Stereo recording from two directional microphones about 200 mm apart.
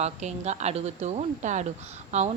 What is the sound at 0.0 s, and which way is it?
A woman's voice, 35° right (ahead or behind).